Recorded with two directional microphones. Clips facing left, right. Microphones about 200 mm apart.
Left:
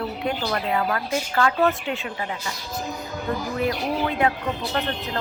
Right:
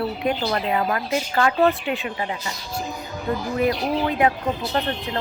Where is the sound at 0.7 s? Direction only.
20° right (ahead or behind).